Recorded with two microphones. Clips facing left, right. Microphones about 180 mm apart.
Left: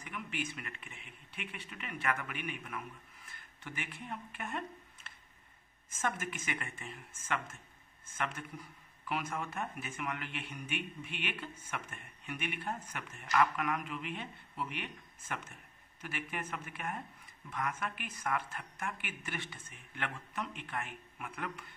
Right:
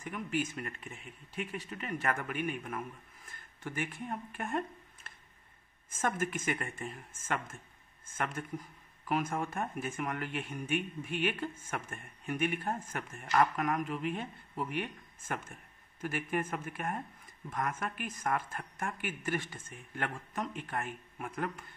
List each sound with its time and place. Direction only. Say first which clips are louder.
0.0 s speech: right 6 dB; 45° right (ahead or behind)